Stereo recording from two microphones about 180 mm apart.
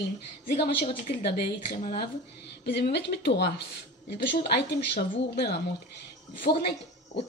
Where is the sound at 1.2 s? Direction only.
60° left (ahead or behind).